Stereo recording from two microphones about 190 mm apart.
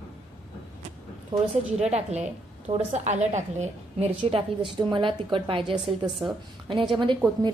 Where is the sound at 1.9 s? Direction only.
35° right (ahead or behind).